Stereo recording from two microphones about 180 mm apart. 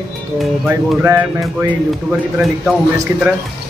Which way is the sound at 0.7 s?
15° right (ahead or behind).